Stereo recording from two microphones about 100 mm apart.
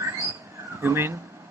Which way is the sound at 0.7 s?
25° right (ahead or behind).